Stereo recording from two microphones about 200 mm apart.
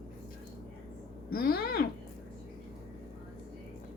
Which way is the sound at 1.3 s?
50° left (ahead or behind).